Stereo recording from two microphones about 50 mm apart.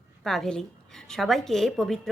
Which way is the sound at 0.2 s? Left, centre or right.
Centre.